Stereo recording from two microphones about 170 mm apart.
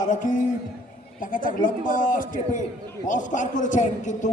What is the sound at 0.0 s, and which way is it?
A man's voice, 45° left (ahead or behind).